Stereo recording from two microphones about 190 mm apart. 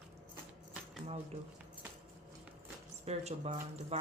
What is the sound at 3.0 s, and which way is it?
Speech, 35° right (ahead or behind).